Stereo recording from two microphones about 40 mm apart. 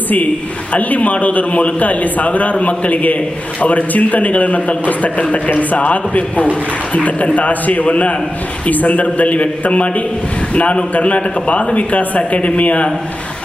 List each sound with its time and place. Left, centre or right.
0.7 s a man's voice: left